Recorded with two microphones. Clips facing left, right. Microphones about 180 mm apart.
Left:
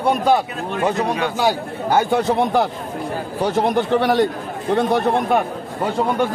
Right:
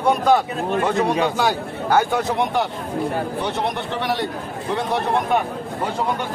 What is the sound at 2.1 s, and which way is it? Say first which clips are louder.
A man's voice: left 4 dB; 30° left (ahead or behind).